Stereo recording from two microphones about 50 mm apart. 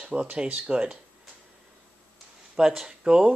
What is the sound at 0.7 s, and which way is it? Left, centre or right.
Speech, centre.